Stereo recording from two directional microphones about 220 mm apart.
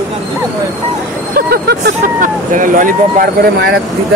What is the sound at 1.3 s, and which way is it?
Speech, 45° right (ahead or behind).